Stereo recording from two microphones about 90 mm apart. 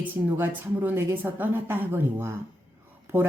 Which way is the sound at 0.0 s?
20° right (ahead or behind).